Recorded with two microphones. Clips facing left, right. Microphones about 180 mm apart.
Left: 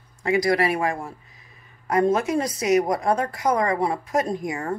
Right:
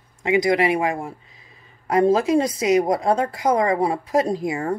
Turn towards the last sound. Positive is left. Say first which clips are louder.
# right 4 dB
turn(degrees=-30)  # may be behind; listen again after turning